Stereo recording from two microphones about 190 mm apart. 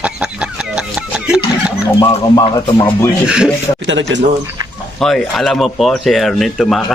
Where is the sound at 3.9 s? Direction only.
75° right (ahead or behind).